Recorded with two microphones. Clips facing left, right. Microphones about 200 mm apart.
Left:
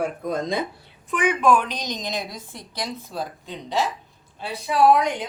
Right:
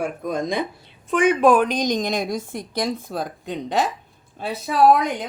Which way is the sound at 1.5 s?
50° right (ahead or behind).